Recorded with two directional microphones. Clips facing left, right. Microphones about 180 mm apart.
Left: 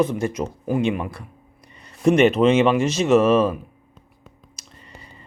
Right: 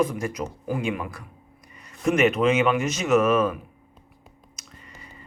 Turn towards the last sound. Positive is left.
turn(degrees=30)  # may be behind; listen again after turning